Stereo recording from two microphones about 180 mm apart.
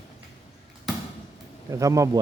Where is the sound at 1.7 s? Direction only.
15° right (ahead or behind).